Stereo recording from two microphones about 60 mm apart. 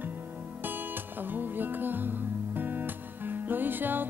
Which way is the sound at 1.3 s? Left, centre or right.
Right.